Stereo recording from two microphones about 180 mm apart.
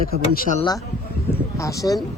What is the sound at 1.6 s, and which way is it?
Speech, 20° left (ahead or behind).